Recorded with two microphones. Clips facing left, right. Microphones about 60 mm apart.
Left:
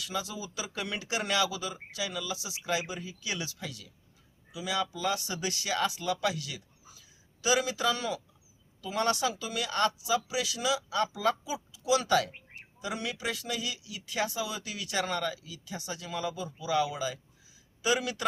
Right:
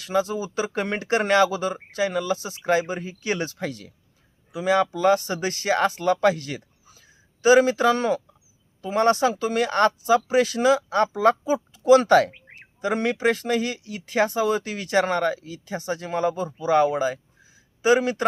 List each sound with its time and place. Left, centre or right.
0.0 s speech: right